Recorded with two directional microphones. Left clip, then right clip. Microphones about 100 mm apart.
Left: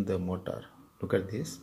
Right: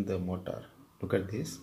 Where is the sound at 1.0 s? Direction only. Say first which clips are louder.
Left 2 dB; 25° left (ahead or behind).